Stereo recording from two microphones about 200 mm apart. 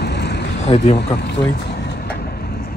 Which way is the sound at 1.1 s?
55° left (ahead or behind).